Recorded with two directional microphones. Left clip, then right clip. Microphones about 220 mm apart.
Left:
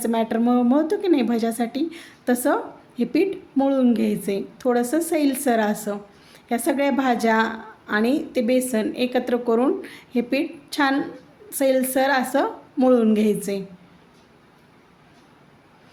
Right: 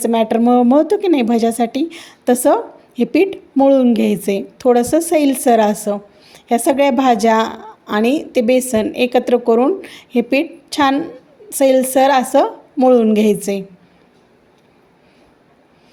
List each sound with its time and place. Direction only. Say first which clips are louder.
0.0 s a woman's voice: right 8 dB; 30° right (ahead or behind)